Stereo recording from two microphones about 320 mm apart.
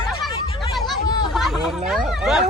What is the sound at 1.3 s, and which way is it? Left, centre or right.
Speech, centre.